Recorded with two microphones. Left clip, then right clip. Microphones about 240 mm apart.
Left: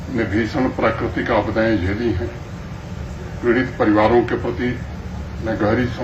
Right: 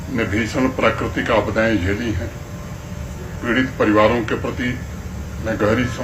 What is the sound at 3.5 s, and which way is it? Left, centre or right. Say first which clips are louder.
A man's voice: even; right.